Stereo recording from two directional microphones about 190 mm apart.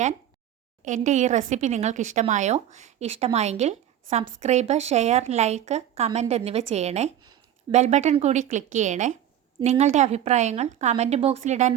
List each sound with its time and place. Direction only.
0.8 s speech: 40° right (ahead or behind)